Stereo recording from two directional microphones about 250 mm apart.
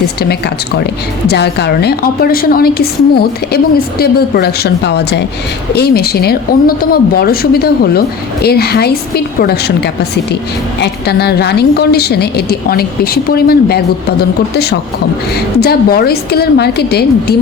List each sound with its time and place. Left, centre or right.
1.3 s speech: left